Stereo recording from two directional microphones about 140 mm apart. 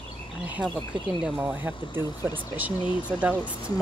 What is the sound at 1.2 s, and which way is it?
Speech, 15° right (ahead or behind).